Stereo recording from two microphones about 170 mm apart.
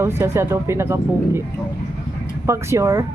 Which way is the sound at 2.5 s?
15° right (ahead or behind).